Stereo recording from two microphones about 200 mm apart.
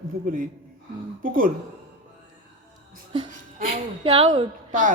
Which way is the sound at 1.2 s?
45° right (ahead or behind).